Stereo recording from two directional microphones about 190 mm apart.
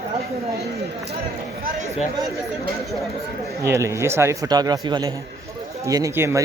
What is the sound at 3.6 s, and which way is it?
Speech, 15° right (ahead or behind).